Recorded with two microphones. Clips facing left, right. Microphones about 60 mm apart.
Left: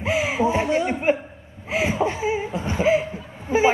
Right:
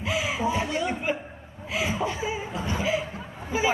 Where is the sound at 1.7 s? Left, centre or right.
Left.